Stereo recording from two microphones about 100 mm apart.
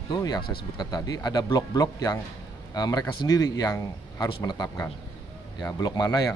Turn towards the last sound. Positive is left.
turn(degrees=40)  # may be behind; listen again after turning